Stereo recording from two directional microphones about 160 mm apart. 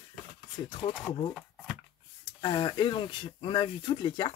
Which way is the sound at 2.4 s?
25° left (ahead or behind).